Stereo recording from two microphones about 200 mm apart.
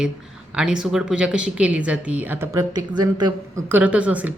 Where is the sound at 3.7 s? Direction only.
5° right (ahead or behind).